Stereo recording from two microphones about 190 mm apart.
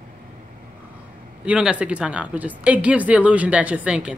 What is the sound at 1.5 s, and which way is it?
Speech, 5° right (ahead or behind).